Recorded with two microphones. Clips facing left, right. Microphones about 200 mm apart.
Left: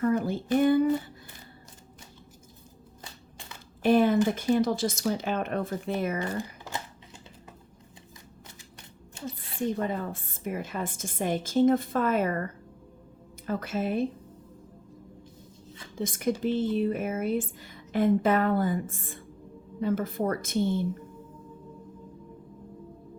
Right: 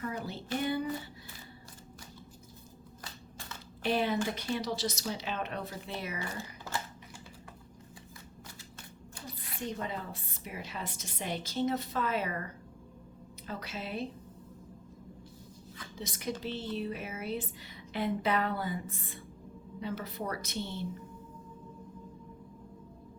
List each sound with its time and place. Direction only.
0.0 s speech: 50° left (ahead or behind)
3.0 s crushing: 15° left (ahead or behind)
3.8 s a woman's voice: 50° left (ahead or behind)
9.1 s a sound: 25° left (ahead or behind)
9.6 s a woman's voice: 50° left (ahead or behind)
13.5 s a woman's voice: 50° left (ahead or behind)
16.0 s a woman's voice: 50° left (ahead or behind)